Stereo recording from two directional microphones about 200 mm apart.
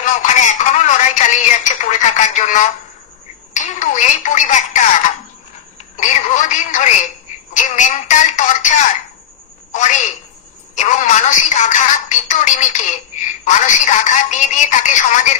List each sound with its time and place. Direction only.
0.0 s speech: 40° left (ahead or behind)
5.9 s speech: 40° left (ahead or behind)
9.7 s a sound: 40° left (ahead or behind)
10.7 s speech: 35° left (ahead or behind)